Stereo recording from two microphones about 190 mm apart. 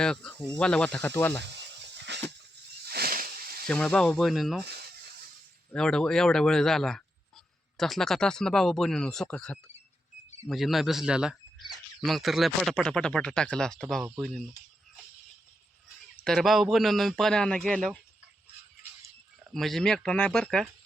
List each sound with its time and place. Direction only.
0.0 s speech: 5° left (ahead or behind)
1.5 s a sound: 65° right (ahead or behind)
2.8 s snake: 55° right (ahead or behind)
3.7 s speech: 5° left (ahead or behind)
4.6 s a sound: 55° right (ahead or behind)
5.7 s speech: 5° left (ahead or behind)
16.2 s speech: centre (ahead or behind)
19.5 s speech: centre (ahead or behind)